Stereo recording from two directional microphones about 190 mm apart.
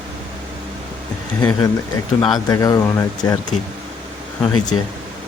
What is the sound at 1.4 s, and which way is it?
Speech, 10° left (ahead or behind).